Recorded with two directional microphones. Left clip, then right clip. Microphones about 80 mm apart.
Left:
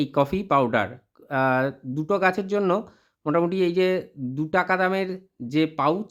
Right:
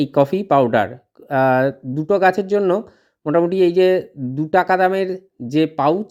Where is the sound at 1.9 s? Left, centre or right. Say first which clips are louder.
Right 6 dB; centre.